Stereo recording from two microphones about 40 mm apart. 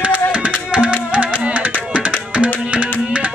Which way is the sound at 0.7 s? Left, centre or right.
Right.